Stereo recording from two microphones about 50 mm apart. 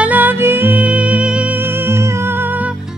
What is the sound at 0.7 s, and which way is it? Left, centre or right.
Music, right.